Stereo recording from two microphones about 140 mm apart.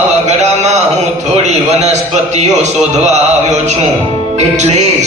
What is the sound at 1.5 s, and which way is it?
Speech, 55° right (ahead or behind).